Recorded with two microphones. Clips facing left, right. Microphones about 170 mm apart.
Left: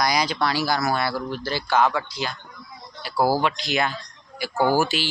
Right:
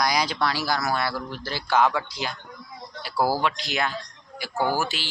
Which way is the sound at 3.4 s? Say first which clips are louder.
Left 3 dB; centre (ahead or behind).